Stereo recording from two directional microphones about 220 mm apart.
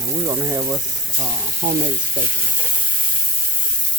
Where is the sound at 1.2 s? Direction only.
25° right (ahead or behind).